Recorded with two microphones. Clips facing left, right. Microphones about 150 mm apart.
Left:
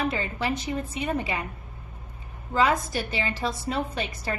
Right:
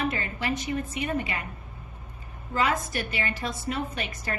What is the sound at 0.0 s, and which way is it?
A woman's voice, 30° left (ahead or behind).